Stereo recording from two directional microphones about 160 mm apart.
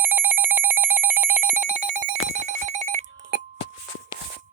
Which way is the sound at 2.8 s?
45° right (ahead or behind).